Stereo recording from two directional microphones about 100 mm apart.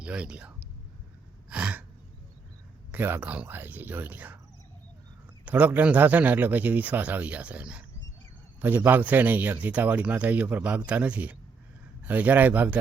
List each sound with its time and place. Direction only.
0.0 s a man's voice: 10° right (ahead or behind)
1.5 s gasp: 10° right (ahead or behind)
2.9 s a man's voice: 20° right (ahead or behind)
5.5 s a man's voice: 15° right (ahead or behind)